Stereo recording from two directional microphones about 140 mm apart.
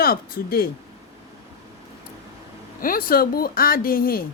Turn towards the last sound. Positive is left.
turn(degrees=90)